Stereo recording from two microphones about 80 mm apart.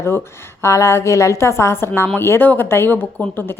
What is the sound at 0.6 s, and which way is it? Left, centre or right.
A woman's voice, left.